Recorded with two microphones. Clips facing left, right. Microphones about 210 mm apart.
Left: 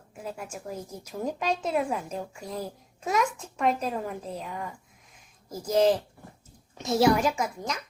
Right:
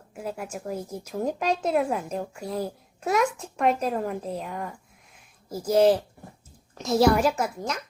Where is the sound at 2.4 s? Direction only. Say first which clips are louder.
Right 5 dB; 35° right (ahead or behind).